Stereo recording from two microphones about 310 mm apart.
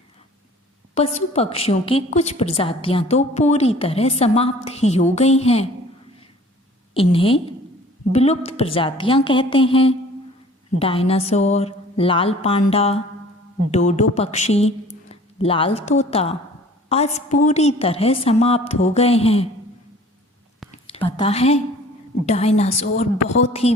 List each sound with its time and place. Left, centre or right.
0.9 s a woman's voice: centre
6.9 s a woman's voice: centre
20.7 s a sound: centre
21.0 s a woman's voice: centre